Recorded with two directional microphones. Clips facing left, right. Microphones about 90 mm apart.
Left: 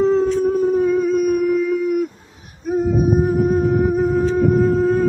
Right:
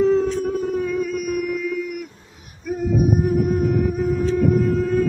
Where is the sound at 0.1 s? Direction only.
35° left (ahead or behind).